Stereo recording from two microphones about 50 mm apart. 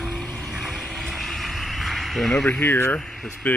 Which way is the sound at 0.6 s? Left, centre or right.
Centre.